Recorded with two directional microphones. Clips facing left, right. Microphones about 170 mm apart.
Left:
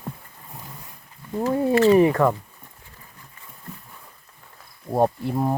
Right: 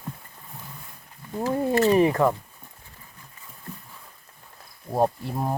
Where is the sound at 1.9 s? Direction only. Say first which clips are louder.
Left 2 dB; 15° right (ahead or behind).